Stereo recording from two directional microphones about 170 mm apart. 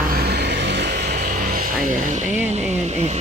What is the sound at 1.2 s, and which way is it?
Music, 50° right (ahead or behind).